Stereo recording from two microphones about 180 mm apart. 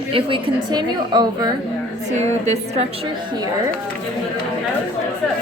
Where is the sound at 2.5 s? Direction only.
35° right (ahead or behind).